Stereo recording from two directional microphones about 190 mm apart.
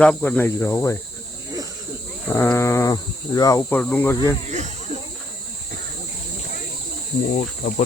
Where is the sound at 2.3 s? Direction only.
10° left (ahead or behind).